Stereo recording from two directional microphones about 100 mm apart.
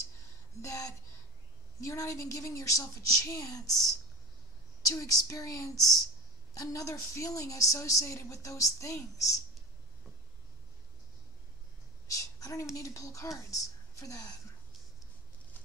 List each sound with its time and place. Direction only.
0.6 s a woman's voice: 30° left (ahead or behind)
4.8 s a woman's voice: 35° left (ahead or behind)
12.1 s a sound: 35° left (ahead or behind)
12.7 s a woman's voice: 35° left (ahead or behind)